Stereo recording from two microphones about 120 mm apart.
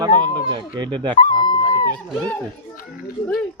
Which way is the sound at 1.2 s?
45° left (ahead or behind).